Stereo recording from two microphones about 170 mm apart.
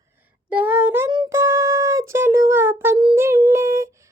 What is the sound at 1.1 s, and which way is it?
Music, 20° right (ahead or behind).